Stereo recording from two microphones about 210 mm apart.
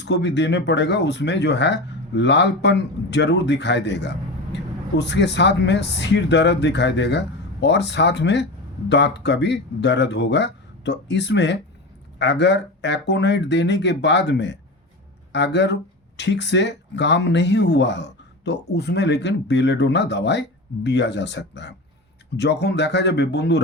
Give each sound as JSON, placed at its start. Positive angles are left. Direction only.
{"t": 0.0, "sound": "speech", "side_deg": 55}